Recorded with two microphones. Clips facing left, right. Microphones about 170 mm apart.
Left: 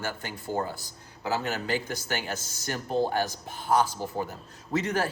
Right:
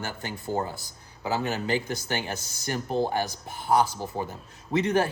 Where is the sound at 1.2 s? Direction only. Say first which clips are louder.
Right 2 dB; 15° right (ahead or behind).